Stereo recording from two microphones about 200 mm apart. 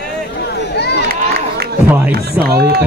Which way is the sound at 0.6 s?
55° left (ahead or behind).